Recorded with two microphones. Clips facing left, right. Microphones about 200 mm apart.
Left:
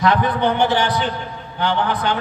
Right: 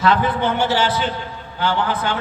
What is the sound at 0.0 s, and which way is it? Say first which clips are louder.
A man's voice: left 1 dB; 20° left (ahead or behind).